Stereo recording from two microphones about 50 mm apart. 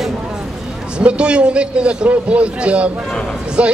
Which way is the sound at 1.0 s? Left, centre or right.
Right.